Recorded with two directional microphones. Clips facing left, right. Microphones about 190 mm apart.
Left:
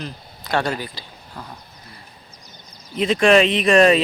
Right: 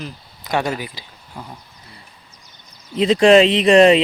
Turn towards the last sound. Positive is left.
turn(degrees=-25)  # may be behind; listen again after turning